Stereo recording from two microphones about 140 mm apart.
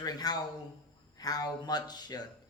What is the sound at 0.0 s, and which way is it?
A man's voice, 30° left (ahead or behind).